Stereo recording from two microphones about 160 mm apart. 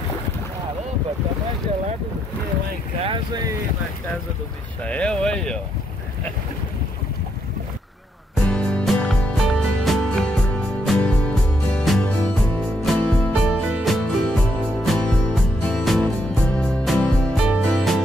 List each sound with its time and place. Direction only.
3.1 s speech: 25° right (ahead or behind)
4.8 s speech: 5° left (ahead or behind)
8.5 s music: 5° left (ahead or behind)